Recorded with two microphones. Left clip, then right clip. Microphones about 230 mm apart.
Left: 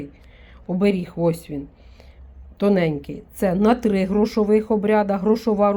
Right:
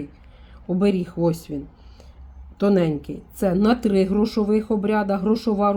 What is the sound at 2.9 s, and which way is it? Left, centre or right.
Speech, centre.